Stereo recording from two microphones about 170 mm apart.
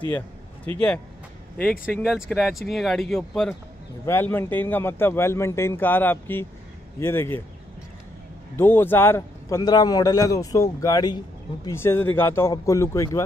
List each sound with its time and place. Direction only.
0.7 s a man's voice: 10° left (ahead or behind)
2.0 s speech: 5° right (ahead or behind)
4.0 s a man's voice: 15° left (ahead or behind)
8.5 s a man's voice: 10° left (ahead or behind)